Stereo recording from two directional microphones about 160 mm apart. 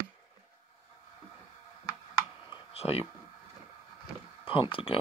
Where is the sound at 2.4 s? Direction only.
40° left (ahead or behind).